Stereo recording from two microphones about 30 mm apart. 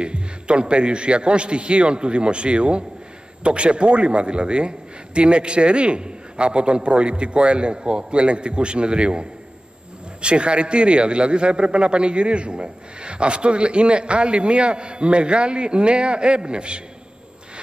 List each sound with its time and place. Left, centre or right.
0.0 s a man's voice: right
10.2 s a man's voice: right